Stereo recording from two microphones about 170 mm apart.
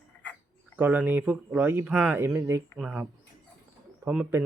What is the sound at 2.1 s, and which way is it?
Speech, 15° right (ahead or behind).